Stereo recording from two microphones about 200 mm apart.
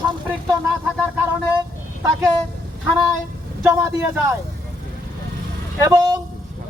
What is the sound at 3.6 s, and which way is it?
Speech, 10° right (ahead or behind).